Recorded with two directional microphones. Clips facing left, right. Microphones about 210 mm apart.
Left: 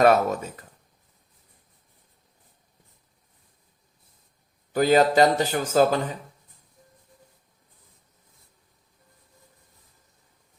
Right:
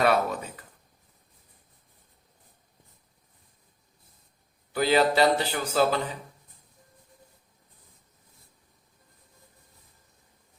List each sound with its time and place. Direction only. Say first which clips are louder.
0.0 s speech: left 5 dB; 45° left (ahead or behind)
4.7 s speech: left 4 dB; 45° left (ahead or behind)